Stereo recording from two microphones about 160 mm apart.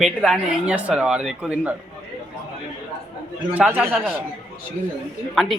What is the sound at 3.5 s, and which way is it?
Speech, 10° right (ahead or behind).